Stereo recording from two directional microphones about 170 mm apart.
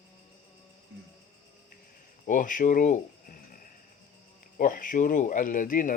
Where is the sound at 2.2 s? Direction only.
50° left (ahead or behind).